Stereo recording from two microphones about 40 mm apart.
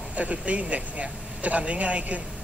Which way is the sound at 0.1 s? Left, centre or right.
Right.